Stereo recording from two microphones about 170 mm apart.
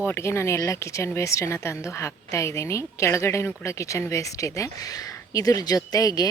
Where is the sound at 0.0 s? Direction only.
15° left (ahead or behind).